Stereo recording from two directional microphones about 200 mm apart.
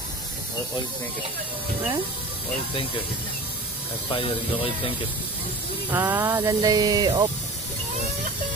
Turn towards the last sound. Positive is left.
turn(degrees=-20)  # may be behind; listen again after turning